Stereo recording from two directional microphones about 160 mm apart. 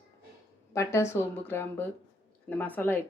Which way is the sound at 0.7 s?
20° left (ahead or behind).